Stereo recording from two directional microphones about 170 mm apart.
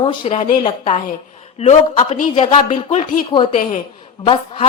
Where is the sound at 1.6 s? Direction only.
40° left (ahead or behind).